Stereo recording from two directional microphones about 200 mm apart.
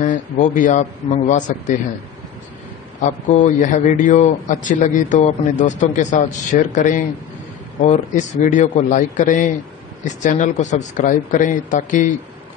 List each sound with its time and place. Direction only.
0.0 s speech: 40° left (ahead or behind)
3.0 s speech: 40° left (ahead or behind)